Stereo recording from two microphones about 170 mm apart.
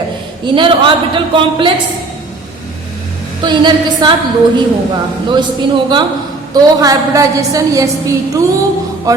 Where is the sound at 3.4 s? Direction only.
25° right (ahead or behind).